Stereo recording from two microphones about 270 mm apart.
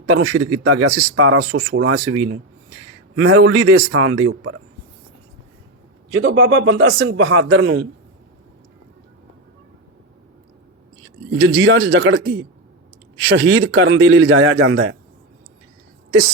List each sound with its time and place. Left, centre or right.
0.0 s speech: right
6.2 s speech: right
11.3 s speech: right
13.3 s speech: right